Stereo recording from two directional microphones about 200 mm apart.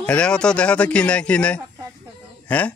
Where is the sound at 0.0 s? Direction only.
5° left (ahead or behind).